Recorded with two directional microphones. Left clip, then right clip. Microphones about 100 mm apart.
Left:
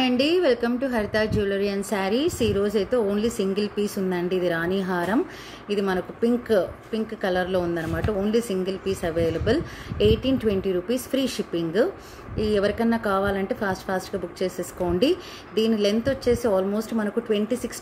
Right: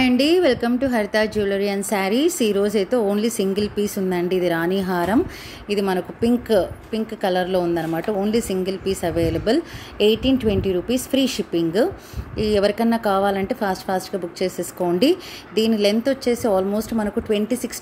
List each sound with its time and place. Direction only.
0.0 s speech: 55° right (ahead or behind)